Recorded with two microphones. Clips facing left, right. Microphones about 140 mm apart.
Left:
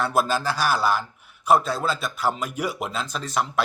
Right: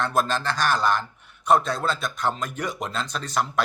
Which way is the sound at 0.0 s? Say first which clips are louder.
Left 1 dB; 5° left (ahead or behind).